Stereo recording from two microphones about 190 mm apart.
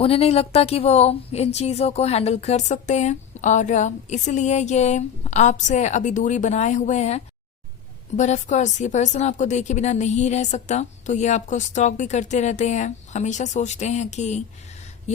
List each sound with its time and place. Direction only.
0.0 s speech: 30° left (ahead or behind)